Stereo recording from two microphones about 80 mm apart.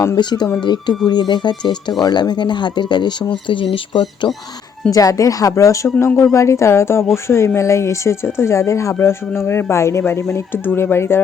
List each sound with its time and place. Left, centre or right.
0.2 s speech: left
4.9 s a woman's voice: left